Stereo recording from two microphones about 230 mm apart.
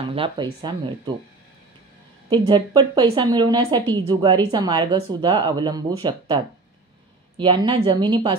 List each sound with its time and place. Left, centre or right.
0.1 s a woman's voice: right
2.2 s a woman's voice: centre